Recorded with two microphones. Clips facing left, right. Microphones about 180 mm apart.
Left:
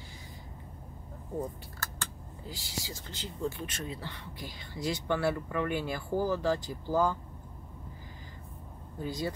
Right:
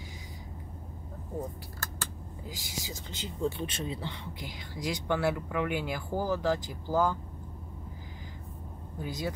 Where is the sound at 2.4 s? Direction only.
15° right (ahead or behind).